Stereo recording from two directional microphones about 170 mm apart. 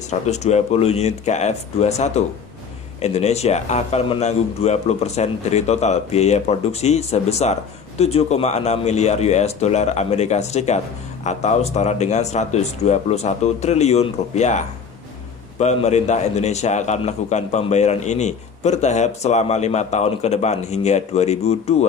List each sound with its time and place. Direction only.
0.1 s a man's voice: 40° left (ahead or behind)
15.6 s a man's voice: 40° left (ahead or behind)